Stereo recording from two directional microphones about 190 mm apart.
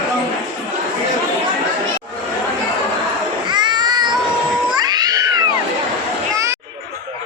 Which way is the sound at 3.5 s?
25° right (ahead or behind).